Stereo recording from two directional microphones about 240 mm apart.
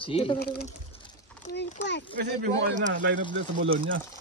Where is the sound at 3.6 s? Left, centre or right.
Right.